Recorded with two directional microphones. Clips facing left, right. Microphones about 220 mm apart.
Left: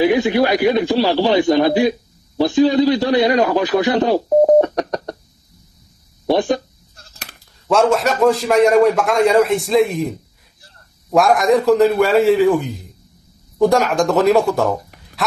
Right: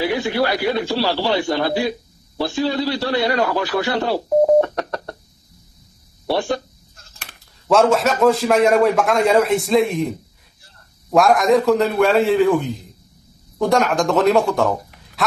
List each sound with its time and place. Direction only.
0.0 s a man's voice: 20° left (ahead or behind)
6.2 s speech: 15° left (ahead or behind)
7.6 s a man's voice: centre (ahead or behind)